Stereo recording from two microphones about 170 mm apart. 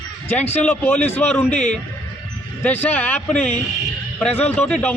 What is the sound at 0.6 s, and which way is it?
A man's voice, 10° left (ahead or behind).